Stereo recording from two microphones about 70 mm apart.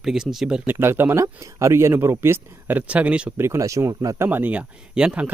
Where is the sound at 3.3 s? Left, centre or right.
Right.